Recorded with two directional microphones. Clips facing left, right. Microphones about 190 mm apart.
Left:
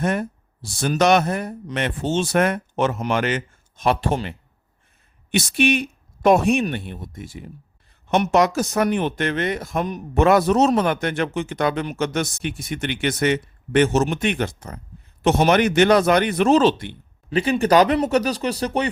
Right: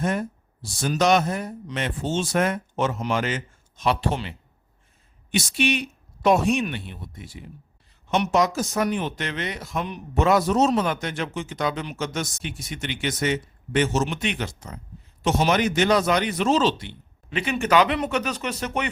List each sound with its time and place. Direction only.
0.0 s a man's voice: 65° left (ahead or behind); by 7.5 s 50° left (ahead or behind)
8.1 s a man's voice: 60° left (ahead or behind)
10.2 s a man's voice: 60° left (ahead or behind)
17.2 s speech: 35° left (ahead or behind)